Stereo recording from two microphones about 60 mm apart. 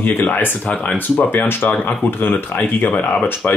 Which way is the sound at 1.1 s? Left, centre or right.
Left.